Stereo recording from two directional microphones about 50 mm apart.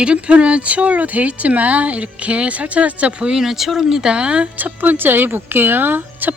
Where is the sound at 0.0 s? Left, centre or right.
Right.